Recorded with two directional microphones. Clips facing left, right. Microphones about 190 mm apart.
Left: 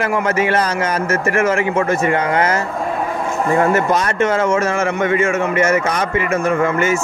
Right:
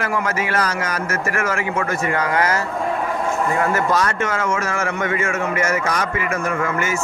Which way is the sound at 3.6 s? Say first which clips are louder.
Left 4 dB; 25° left (ahead or behind).